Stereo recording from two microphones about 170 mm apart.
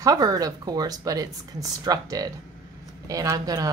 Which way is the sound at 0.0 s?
20° right (ahead or behind).